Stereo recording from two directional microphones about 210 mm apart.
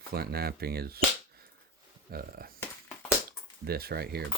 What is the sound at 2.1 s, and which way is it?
Speech, 45° right (ahead or behind).